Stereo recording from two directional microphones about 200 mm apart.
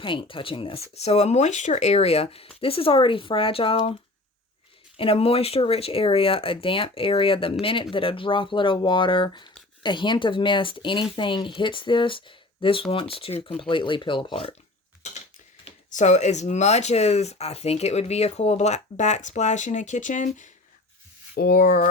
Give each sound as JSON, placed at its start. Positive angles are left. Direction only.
{"t": 0.0, "sound": "speech", "side_deg": 25}
{"t": 4.9, "sound": "speech", "side_deg": 30}
{"t": 15.6, "sound": "speech", "side_deg": 35}
{"t": 21.3, "sound": "speech", "side_deg": 50}